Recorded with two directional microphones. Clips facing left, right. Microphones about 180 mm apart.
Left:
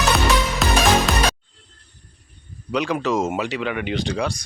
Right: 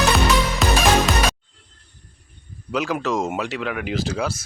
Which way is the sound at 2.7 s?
Centre (ahead or behind).